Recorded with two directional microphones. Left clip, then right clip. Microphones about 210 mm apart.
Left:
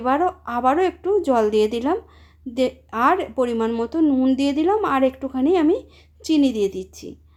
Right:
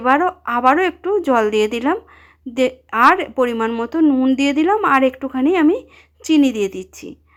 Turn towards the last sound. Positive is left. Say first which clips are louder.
# right 3 dB
turn(degrees=-15)  # may be behind; listen again after turning